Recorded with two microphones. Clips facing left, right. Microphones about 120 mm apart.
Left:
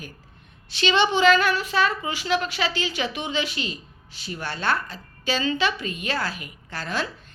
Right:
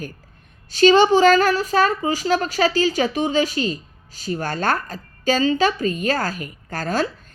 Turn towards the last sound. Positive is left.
turn(degrees=-40)  # may be behind; listen again after turning